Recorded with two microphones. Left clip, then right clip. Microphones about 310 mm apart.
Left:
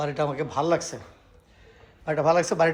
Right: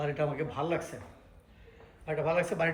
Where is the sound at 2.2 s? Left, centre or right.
Centre.